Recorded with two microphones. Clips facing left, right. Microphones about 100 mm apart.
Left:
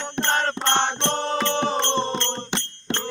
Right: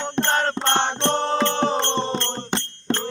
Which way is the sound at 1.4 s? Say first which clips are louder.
Right 2 dB; 45° right (ahead or behind).